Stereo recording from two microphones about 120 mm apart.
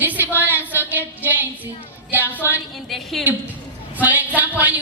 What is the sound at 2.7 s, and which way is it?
Speech, centre (ahead or behind).